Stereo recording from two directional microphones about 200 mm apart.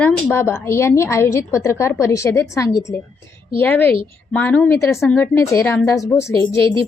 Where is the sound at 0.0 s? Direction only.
10° left (ahead or behind).